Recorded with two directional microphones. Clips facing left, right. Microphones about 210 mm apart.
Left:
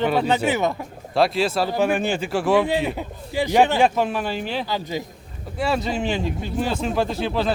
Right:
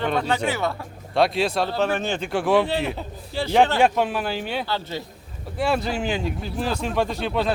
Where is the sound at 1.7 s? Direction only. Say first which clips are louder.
Left 3 dB; 15° left (ahead or behind).